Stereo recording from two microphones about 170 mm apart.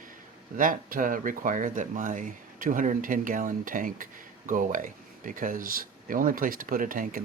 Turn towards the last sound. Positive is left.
turn(degrees=-55)  # may be behind; listen again after turning